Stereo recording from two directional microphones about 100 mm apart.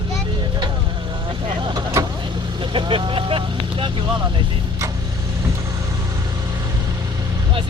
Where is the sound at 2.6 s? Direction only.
55° right (ahead or behind).